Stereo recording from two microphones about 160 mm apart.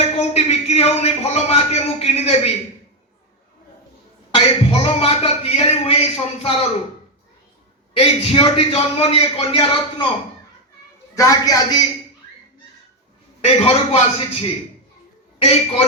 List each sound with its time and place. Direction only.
0.0 s a man's voice: 40° left (ahead or behind)
4.4 s speech: 35° left (ahead or behind)
7.9 s speech: 35° left (ahead or behind)
11.1 s a woman's voice: 20° left (ahead or behind)
13.4 s speech: 40° left (ahead or behind)